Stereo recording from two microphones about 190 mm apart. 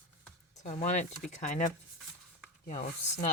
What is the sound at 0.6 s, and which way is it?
Speech, 40° left (ahead or behind).